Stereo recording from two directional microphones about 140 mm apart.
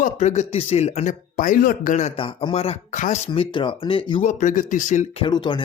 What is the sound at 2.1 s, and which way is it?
Speech, 40° left (ahead or behind).